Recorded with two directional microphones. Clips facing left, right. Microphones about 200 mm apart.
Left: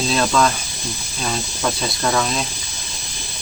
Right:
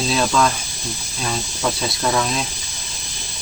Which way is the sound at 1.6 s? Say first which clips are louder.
Even; centre (ahead or behind).